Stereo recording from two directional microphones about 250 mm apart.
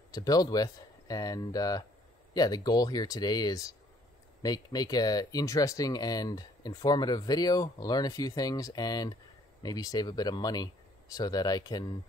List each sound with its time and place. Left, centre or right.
0.1 s speech: centre